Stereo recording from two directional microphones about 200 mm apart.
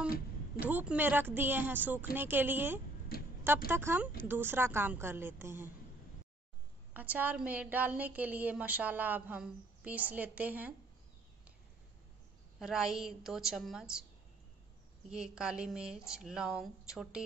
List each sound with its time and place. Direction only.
0.6 s a woman's voice: 10° right (ahead or behind)
3.1 s a sound: 50° left (ahead or behind)
3.4 s a woman's voice: 10° right (ahead or behind)
6.9 s a woman's voice: 10° right (ahead or behind)
12.5 s a woman's voice: 5° right (ahead or behind)
15.0 s a woman's voice: 5° right (ahead or behind)